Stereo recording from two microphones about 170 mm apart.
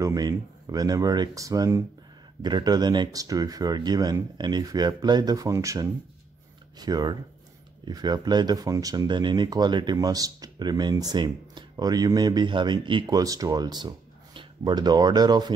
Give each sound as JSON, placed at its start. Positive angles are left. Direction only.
{"t": 0.0, "sound": "speech", "side_deg": -20}